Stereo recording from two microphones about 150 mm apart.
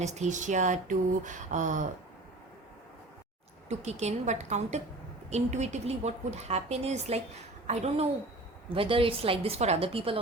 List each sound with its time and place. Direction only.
0.0 s speech: 50° right (ahead or behind)
3.7 s a woman's voice: 50° right (ahead or behind)
8.7 s a woman's voice: 35° right (ahead or behind)